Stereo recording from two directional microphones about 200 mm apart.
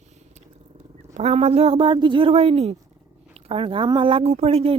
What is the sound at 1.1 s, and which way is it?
Speech, 30° right (ahead or behind).